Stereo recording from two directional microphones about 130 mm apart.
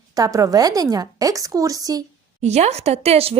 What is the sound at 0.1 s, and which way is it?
A woman's voice, 25° right (ahead or behind).